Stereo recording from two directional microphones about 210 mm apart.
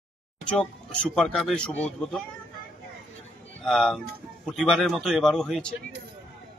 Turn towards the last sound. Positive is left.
turn(degrees=5)  # may be behind; listen again after turning